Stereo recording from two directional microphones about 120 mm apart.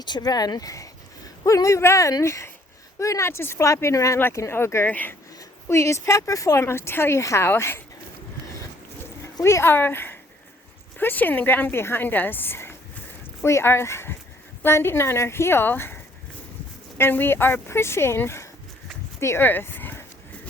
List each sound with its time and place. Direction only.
0.0 s speech: 35° left (ahead or behind); by 7.8 s 20° left (ahead or behind)
9.2 s a woman's voice: 20° left (ahead or behind)
17.0 s speech: 15° left (ahead or behind)
19.2 s a sound: 20° left (ahead or behind)